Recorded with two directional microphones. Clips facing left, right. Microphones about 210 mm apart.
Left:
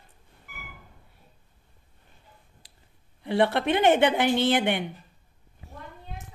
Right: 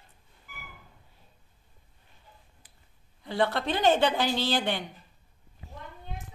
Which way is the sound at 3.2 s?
25° left (ahead or behind).